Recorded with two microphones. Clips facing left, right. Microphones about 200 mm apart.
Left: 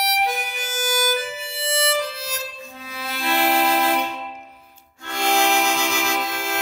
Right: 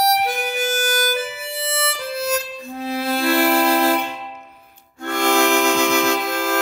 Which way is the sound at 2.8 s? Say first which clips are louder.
Right 9 dB; 45° right (ahead or behind).